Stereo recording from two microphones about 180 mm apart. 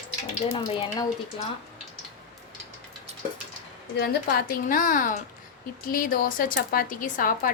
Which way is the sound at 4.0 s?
65° left (ahead or behind).